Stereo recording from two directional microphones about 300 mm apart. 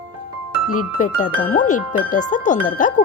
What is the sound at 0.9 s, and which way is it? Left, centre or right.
Speech, left.